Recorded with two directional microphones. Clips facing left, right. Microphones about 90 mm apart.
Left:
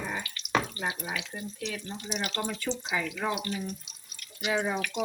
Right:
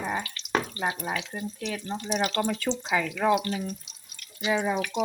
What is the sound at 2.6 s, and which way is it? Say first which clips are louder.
Speech: right 4 dB; 90° right.